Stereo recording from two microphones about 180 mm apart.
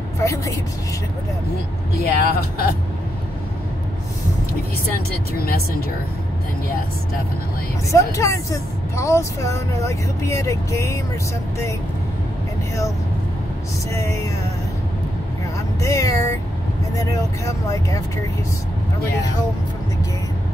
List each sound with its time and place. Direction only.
0.2 s speech: 15° left (ahead or behind)
2.0 s speech: 60° left (ahead or behind)
5.4 s speech: 60° left (ahead or behind)
7.9 s speech: 15° left (ahead or behind)
13.9 s speech: 15° left (ahead or behind)
15.8 s speech: 15° left (ahead or behind)